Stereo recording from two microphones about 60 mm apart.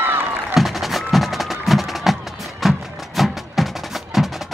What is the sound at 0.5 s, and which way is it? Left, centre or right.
Music, centre.